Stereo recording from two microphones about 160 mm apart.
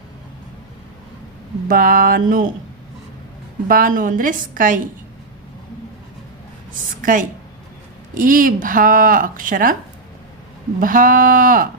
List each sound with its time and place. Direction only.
1.6 s speech: 60° right (ahead or behind)
3.7 s speech: 60° right (ahead or behind)
7.0 s a woman's voice: 55° right (ahead or behind)
10.8 s speech: 60° right (ahead or behind)